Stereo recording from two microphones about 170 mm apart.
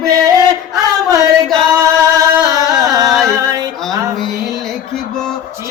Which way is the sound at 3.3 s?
20° right (ahead or behind).